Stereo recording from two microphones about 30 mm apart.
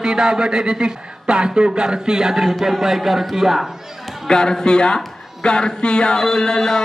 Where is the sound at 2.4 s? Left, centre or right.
Centre.